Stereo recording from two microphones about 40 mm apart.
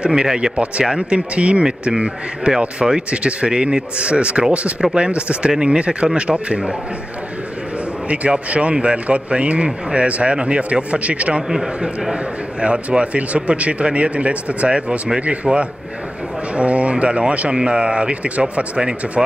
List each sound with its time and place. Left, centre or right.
0.1 s a man's voice: centre
8.1 s a man's voice: right
11.4 s a man's voice: centre